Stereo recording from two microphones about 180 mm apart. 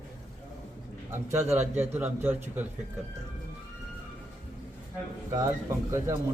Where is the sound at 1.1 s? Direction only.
15° right (ahead or behind).